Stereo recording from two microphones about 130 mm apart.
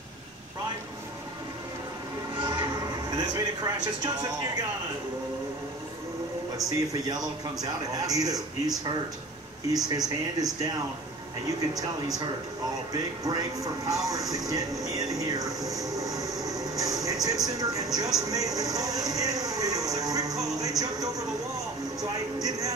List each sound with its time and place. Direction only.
2.4 s a sound: 35° right (ahead or behind)
3.3 s speech: 30° right (ahead or behind)
6.6 s speech: 30° right (ahead or behind)
14.5 s music: 25° right (ahead or behind)
16.7 s a sound: 25° right (ahead or behind)
17.6 s vehicle: 25° right (ahead or behind)
17.9 s music: 30° right (ahead or behind)
20.5 s a sound: 30° right (ahead or behind)
22.0 s a man's voice: 30° right (ahead or behind)